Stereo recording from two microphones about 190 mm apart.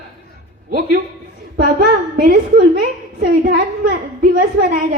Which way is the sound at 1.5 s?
50° right (ahead or behind).